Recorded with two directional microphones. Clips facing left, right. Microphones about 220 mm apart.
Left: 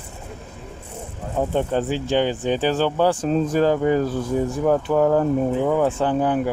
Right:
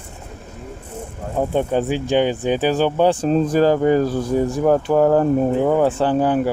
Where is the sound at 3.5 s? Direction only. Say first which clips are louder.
Right 3 dB; 35° right (ahead or behind).